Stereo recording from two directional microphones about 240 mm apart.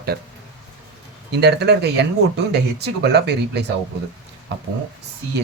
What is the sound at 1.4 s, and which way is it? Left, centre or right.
Speech, right.